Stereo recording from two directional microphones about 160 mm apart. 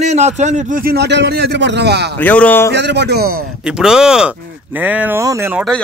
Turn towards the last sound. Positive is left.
turn(degrees=-20)  # may be behind; listen again after turning